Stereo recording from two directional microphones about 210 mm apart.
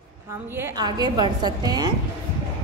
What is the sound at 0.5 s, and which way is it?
A woman's voice, 15° right (ahead or behind).